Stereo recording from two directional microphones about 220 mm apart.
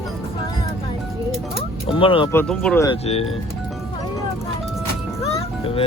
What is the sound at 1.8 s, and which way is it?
Speech, 25° left (ahead or behind).